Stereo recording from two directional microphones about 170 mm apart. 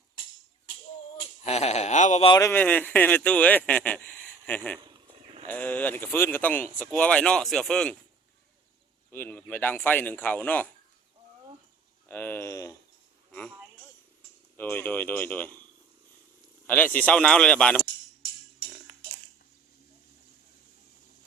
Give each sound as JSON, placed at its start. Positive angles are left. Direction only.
{"t": 1.1, "sound": "speech", "side_deg": 40}
{"t": 2.2, "sound": "speech", "side_deg": 25}
{"t": 2.5, "sound": "speech", "side_deg": 10}
{"t": 4.8, "sound": "a sound", "side_deg": -25}
{"t": 5.2, "sound": "livestock", "side_deg": -35}
{"t": 5.5, "sound": "speech", "side_deg": 10}
{"t": 9.0, "sound": "speech", "side_deg": 10}
{"t": 12.0, "sound": "speech", "side_deg": 10}
{"t": 14.5, "sound": "speech", "side_deg": 10}
{"t": 16.6, "sound": "speech", "side_deg": 10}